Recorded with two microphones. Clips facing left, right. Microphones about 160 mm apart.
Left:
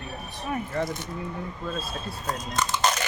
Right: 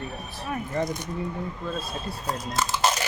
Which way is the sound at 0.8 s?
15° right (ahead or behind).